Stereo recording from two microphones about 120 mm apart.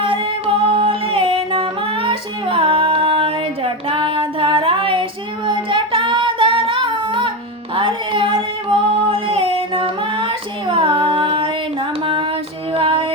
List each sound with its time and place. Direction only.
0.0 s music: 50° right (ahead or behind)
5.5 s child singing: 45° right (ahead or behind)
7.8 s female singing: 45° right (ahead or behind)
12.7 s female singing: 50° right (ahead or behind)